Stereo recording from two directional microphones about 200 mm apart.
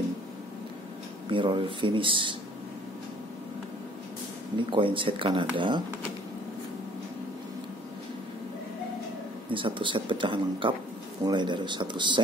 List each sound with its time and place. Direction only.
1.3 s speech: 25° right (ahead or behind)
4.6 s speech: 25° right (ahead or behind)
9.5 s speech: 25° right (ahead or behind)